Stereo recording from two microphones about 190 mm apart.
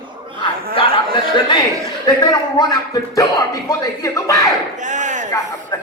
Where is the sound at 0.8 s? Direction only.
25° left (ahead or behind).